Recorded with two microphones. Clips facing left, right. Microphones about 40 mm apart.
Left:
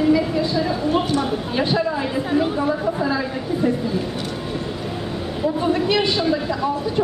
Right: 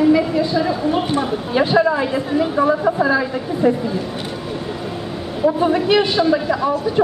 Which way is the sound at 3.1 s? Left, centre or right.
Centre.